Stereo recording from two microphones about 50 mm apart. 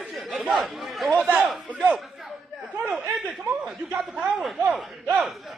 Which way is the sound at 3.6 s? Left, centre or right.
Centre.